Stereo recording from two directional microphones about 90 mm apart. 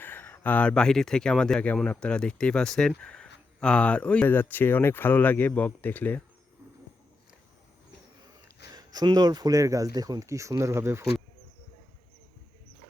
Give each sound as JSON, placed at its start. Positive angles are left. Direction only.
{"t": 0.0, "sound": "speech", "side_deg": 20}
{"t": 8.7, "sound": "speech", "side_deg": -50}